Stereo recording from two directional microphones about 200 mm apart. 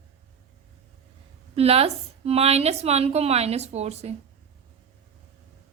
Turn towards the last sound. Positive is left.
turn(degrees=-30)  # may be behind; listen again after turning